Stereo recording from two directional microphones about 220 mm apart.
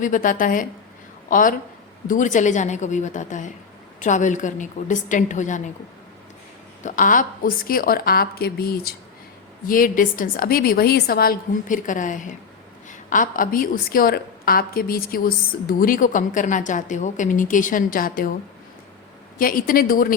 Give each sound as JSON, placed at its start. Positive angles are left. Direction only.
{"t": 0.0, "sound": "a woman's voice", "side_deg": 35}
{"t": 6.8, "sound": "a woman's voice", "side_deg": 35}
{"t": 19.4, "sound": "a woman's voice", "side_deg": 40}